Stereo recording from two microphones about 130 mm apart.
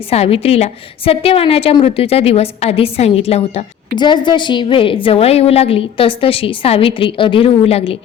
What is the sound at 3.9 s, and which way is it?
A woman's voice, 35° left (ahead or behind).